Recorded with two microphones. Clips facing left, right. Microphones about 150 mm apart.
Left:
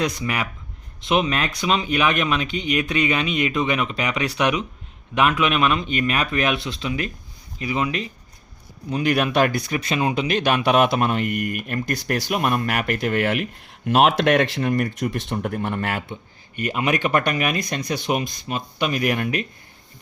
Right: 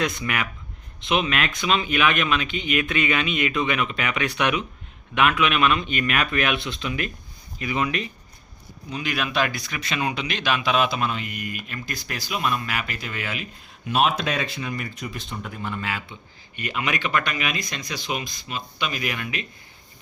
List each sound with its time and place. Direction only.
0.0 s speech: 35° left (ahead or behind)
8.9 s speech: 45° left (ahead or behind)
10.2 s speech: 45° left (ahead or behind)
16.6 s speech: 40° left (ahead or behind)